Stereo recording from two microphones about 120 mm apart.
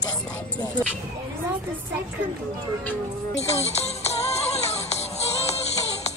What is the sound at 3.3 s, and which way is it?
Music, 65° left (ahead or behind).